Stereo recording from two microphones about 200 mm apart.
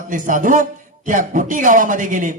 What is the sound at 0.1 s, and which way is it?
A man's voice, 40° right (ahead or behind).